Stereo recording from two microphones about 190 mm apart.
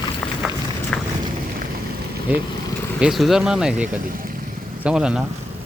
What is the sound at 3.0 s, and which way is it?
Speech, centre (ahead or behind).